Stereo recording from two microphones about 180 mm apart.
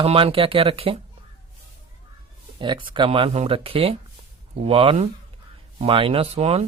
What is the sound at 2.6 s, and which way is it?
Speech, 25° right (ahead or behind).